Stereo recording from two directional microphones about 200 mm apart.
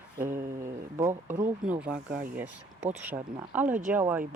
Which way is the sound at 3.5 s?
10° right (ahead or behind).